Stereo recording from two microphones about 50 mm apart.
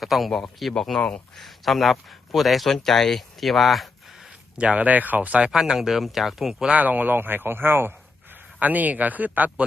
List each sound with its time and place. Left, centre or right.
0.0 s speech: centre
0.8 s speech: centre
4.5 s speech: right
5.5 s speech: centre
6.5 s speech: centre
6.7 s speech: right
8.5 s speech: right